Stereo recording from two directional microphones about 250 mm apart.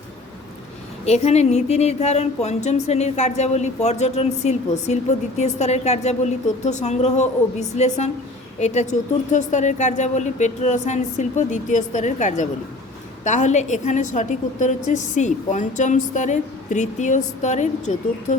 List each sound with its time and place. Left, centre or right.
1.0 s speech: left